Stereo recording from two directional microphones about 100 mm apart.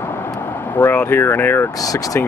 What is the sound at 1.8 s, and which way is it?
Speech, 35° left (ahead or behind).